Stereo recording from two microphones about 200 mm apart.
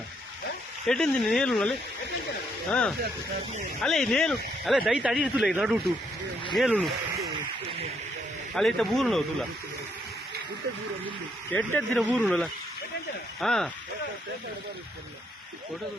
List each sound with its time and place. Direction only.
0.9 s speech: 5° left (ahead or behind)
8.5 s speech: centre (ahead or behind)
11.5 s speech: 5° left (ahead or behind)